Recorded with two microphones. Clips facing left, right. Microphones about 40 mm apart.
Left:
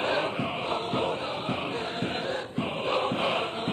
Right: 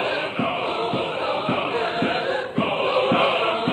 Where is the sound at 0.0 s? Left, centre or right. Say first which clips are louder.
Right 4 dB; right.